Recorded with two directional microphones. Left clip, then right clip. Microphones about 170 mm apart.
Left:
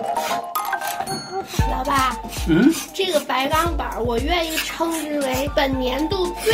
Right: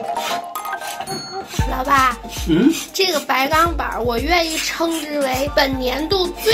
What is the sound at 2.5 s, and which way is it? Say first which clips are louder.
Speech: right 1 dB; 10° left (ahead or behind).